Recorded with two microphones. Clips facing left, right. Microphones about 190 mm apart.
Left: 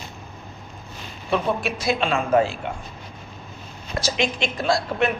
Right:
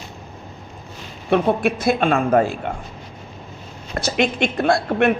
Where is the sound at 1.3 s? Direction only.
55° right (ahead or behind).